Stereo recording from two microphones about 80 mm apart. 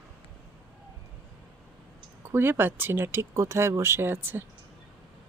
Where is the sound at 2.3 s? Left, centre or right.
Right.